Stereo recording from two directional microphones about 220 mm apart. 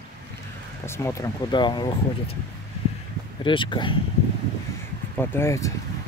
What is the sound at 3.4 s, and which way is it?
Speech, 20° left (ahead or behind).